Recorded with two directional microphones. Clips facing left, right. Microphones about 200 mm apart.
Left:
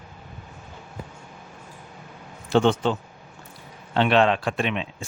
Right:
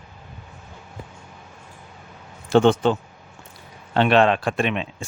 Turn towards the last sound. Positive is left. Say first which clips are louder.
# right 3 dB
turn(degrees=-50)  # may be behind; listen again after turning